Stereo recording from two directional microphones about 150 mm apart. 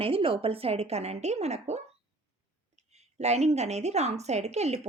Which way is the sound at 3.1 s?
45° right (ahead or behind).